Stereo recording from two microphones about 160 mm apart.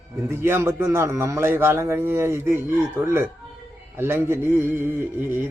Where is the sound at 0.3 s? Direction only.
15° right (ahead or behind).